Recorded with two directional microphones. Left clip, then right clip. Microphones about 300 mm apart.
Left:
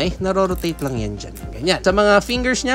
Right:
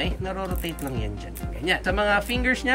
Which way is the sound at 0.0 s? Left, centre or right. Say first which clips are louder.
Left 10 dB; centre.